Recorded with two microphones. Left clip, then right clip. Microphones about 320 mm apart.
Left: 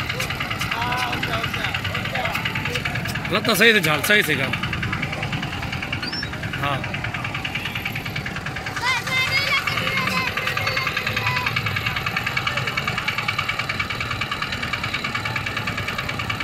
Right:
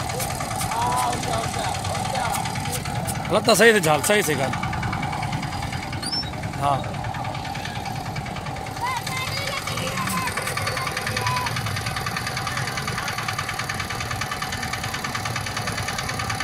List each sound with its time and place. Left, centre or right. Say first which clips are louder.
3.3 s speech: right 1 dB; centre